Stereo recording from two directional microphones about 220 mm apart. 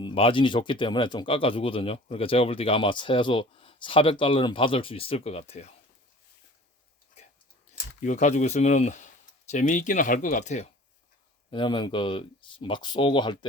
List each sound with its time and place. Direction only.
0.0 s speech: 25° left (ahead or behind)
8.0 s speech: 30° left (ahead or behind)
11.5 s speech: 20° left (ahead or behind)